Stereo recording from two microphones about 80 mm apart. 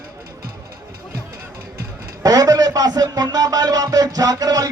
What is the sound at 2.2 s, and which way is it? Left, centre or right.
Speech, right.